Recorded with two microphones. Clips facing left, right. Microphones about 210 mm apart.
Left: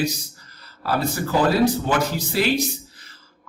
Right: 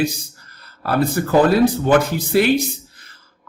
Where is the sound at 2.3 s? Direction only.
55° right (ahead or behind).